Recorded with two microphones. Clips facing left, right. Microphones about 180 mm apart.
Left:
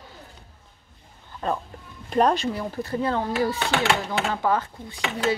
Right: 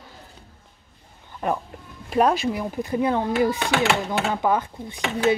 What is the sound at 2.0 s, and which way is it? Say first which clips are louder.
Speech: right 1 dB; 5° right (ahead or behind).